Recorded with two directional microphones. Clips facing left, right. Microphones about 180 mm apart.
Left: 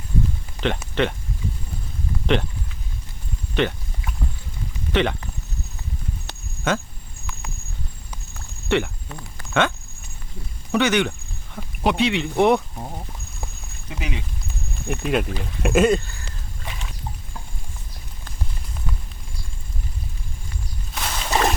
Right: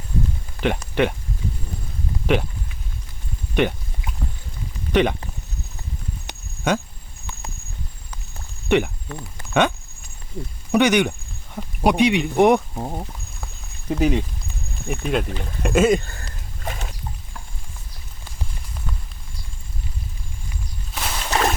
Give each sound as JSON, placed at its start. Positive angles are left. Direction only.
{"t": 0.6, "sound": "speech", "side_deg": -10}
{"t": 2.2, "sound": "speech", "side_deg": -10}
{"t": 3.5, "sound": "a sound", "side_deg": -15}
{"t": 4.9, "sound": "speech", "side_deg": -15}
{"t": 6.7, "sound": "speech", "side_deg": -15}
{"t": 8.7, "sound": "speech", "side_deg": -15}
{"t": 13.8, "sound": "speech", "side_deg": -45}
{"t": 14.8, "sound": "speech", "side_deg": 0}
{"t": 16.6, "sound": "a sound", "side_deg": -45}
{"t": 20.9, "sound": "a sound", "side_deg": 0}